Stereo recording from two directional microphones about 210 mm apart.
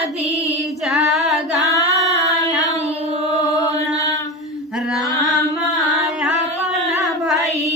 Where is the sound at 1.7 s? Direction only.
15° left (ahead or behind).